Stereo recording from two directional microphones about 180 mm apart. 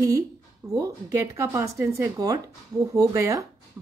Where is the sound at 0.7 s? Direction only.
20° right (ahead or behind).